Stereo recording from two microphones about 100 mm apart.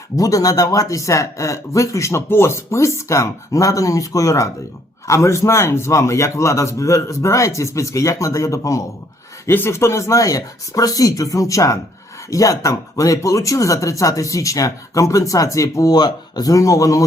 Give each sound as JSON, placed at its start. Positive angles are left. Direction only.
{"t": 0.2, "sound": "speech", "side_deg": 35}
{"t": 9.5, "sound": "speech", "side_deg": 25}